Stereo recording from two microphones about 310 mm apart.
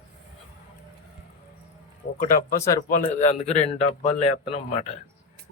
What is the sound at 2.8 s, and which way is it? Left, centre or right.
Speech, left.